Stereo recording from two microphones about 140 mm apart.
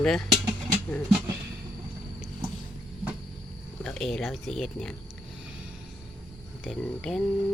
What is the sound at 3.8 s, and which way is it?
Speech, 5° left (ahead or behind).